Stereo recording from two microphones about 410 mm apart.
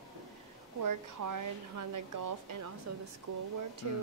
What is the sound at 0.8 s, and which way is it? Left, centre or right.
Speech, right.